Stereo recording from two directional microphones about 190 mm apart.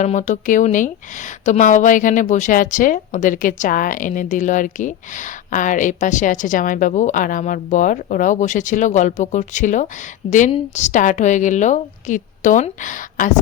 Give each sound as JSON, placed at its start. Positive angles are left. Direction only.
{"t": 0.0, "sound": "a woman's voice", "side_deg": 40}